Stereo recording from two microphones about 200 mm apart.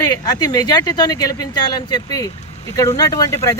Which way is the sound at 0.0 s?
20° left (ahead or behind).